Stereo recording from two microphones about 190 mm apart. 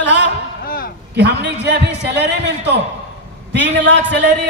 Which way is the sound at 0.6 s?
50° left (ahead or behind).